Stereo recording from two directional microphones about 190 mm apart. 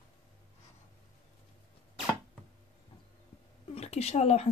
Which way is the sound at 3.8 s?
35° left (ahead or behind).